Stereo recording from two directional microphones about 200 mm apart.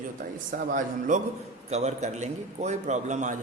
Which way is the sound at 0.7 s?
40° right (ahead or behind).